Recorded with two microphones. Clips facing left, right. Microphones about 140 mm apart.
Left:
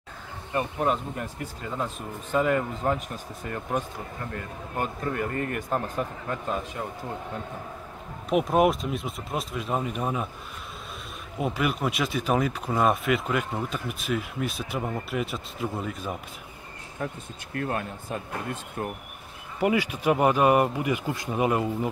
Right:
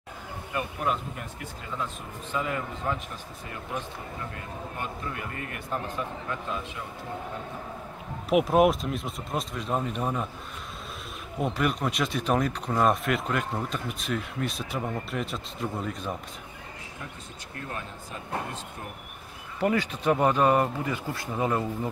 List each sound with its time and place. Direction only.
0.5 s a man's voice: 35° left (ahead or behind)
4.7 s a man's voice: 45° left (ahead or behind)
8.3 s speech: 5° right (ahead or behind)
11.3 s speech: 5° left (ahead or behind)
17.6 s speech: 55° left (ahead or behind)
19.6 s speech: 10° left (ahead or behind)